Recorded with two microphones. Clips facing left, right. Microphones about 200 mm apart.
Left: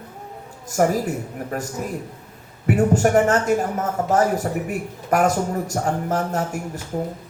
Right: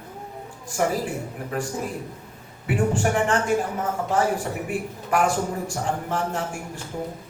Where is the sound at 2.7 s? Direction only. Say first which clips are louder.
Left 5 dB; 40° left (ahead or behind).